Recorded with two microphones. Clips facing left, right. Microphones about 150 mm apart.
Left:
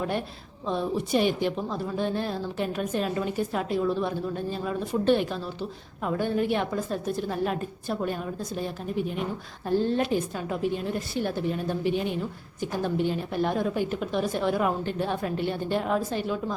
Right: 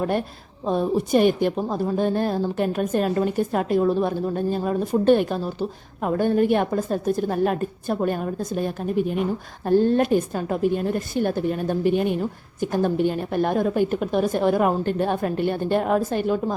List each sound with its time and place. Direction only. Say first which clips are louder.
0.0 s a woman's voice: right 5 dB; 45° right (ahead or behind)